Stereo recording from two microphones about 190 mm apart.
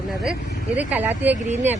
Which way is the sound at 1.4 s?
35° right (ahead or behind).